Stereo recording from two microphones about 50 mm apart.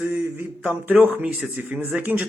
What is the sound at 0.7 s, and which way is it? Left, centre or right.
A man's voice, right.